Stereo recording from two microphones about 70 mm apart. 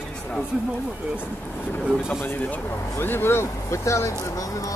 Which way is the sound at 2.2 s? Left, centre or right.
Left.